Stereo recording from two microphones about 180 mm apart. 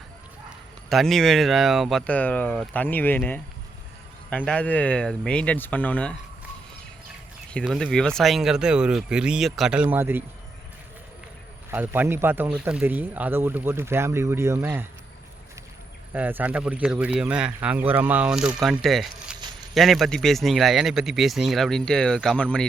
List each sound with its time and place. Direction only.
0.9 s speech: centre (ahead or behind)
7.5 s speech: centre (ahead or behind)
11.7 s speech: 10° right (ahead or behind)
16.1 s speech: 10° right (ahead or behind)